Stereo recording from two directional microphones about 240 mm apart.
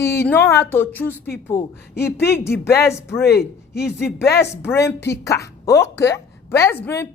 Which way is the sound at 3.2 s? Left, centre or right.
Left.